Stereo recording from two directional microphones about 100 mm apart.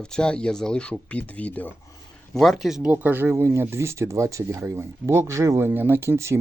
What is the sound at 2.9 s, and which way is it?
Speech, 20° right (ahead or behind).